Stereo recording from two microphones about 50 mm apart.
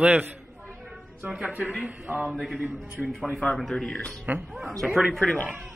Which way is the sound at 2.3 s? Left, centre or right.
Centre.